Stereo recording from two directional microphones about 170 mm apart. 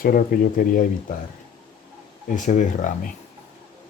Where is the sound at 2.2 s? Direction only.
50° left (ahead or behind).